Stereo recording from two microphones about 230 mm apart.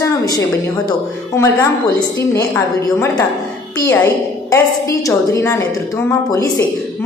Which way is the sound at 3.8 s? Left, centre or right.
Centre.